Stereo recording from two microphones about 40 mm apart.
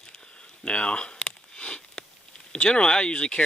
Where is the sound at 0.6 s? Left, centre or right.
Left.